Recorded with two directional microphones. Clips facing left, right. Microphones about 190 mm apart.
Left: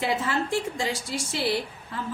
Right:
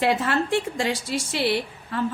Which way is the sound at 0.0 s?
70° right (ahead or behind).